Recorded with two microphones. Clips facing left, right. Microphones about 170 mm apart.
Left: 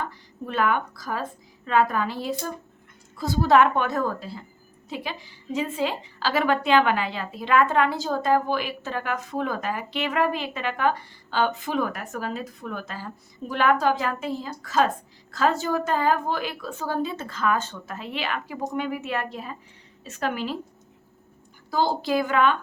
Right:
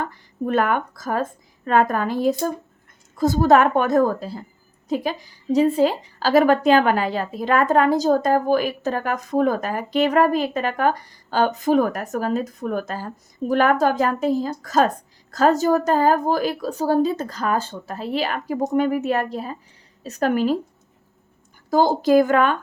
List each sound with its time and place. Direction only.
0.0 s a woman's voice: 50° right (ahead or behind)
21.7 s a woman's voice: 45° right (ahead or behind)